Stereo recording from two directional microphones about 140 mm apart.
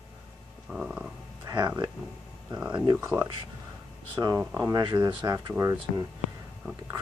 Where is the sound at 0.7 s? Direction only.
5° right (ahead or behind).